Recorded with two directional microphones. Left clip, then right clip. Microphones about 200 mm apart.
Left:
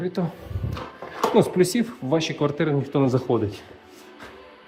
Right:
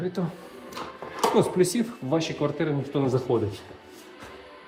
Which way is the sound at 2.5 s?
35° left (ahead or behind).